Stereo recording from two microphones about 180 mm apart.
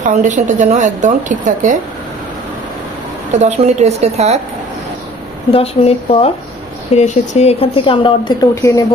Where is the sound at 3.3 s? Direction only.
40° right (ahead or behind).